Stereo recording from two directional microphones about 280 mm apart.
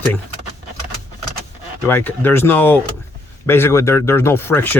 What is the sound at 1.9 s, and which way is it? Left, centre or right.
Speech, centre.